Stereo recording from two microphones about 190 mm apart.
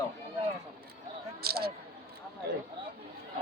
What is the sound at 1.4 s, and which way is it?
Speech, 55° right (ahead or behind).